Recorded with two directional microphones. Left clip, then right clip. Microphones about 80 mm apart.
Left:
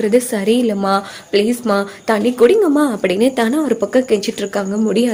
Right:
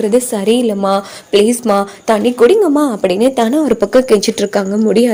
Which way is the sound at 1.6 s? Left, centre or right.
Right.